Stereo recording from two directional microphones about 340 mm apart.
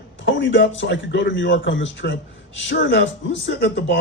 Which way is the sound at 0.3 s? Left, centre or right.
Left.